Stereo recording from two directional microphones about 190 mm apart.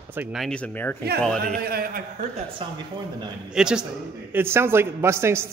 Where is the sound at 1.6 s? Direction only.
55° right (ahead or behind).